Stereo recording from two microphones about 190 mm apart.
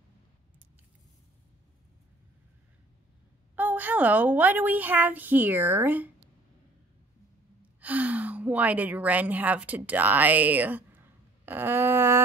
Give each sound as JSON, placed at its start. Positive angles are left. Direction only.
{"t": 3.5, "sound": "a woman's voice", "side_deg": -10}
{"t": 7.8, "sound": "a woman's voice", "side_deg": -10}